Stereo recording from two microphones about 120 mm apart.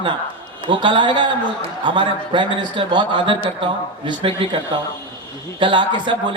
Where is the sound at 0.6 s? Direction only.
40° right (ahead or behind).